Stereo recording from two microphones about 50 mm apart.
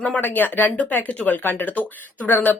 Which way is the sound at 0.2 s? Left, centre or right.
Left.